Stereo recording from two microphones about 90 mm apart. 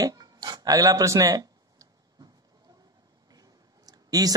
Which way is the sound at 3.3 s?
45° right (ahead or behind).